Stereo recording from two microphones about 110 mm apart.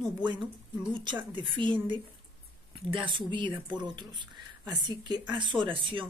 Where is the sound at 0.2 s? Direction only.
45° right (ahead or behind).